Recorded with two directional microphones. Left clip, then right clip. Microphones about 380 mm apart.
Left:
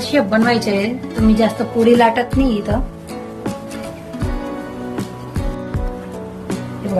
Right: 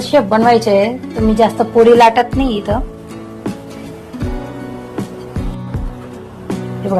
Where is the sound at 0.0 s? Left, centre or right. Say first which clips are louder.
Right 5 dB; centre.